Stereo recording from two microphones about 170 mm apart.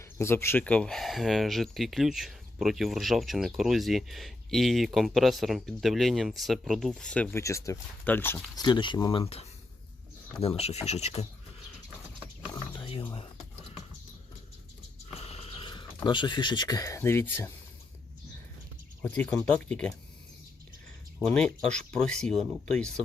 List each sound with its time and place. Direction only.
0.0 s speech: 15° left (ahead or behind)
8.5 s speech: 25° left (ahead or behind)
10.4 s speech: 35° left (ahead or behind)
12.5 s music: 25° left (ahead or behind)
15.2 s a sound: 35° left (ahead or behind)
16.0 s speech: 25° left (ahead or behind)
19.0 s speech: 10° left (ahead or behind)
21.2 s speech: 5° left (ahead or behind)